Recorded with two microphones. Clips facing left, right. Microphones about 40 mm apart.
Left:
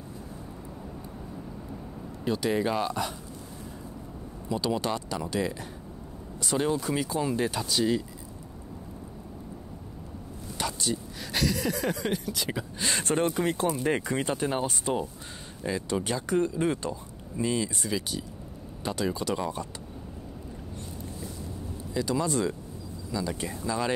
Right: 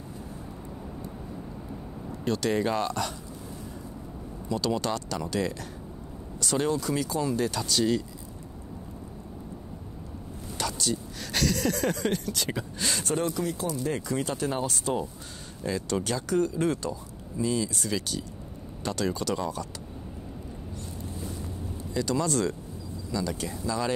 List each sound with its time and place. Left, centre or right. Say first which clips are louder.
2.2 s speech: even; centre
4.5 s speech: even; centre
10.6 s speech: even; centre
13.0 s speech: left 3 dB; left
21.9 s speech: right 1 dB; centre